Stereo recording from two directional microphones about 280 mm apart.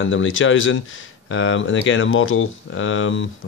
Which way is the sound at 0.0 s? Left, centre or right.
Left.